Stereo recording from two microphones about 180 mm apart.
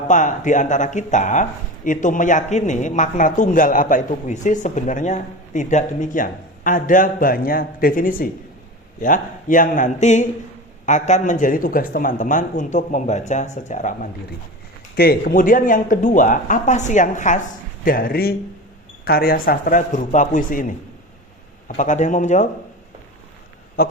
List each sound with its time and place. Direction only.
0.1 s speech: 45° left (ahead or behind)
14.9 s speech: 60° left (ahead or behind)
21.8 s speech: 45° left (ahead or behind)
23.8 s speech: 55° left (ahead or behind)